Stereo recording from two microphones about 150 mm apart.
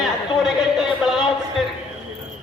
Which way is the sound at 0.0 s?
Centre (ahead or behind).